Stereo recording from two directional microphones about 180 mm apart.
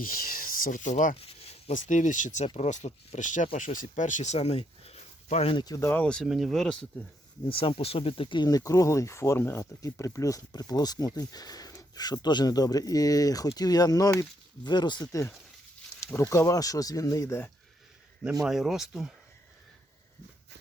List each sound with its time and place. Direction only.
0.0 s speech: 55° left (ahead or behind); by 6.8 s 5° left (ahead or behind)
7.5 s speech: 30° left (ahead or behind); by 17.5 s 15° left (ahead or behind)
18.4 s speech: centre (ahead or behind)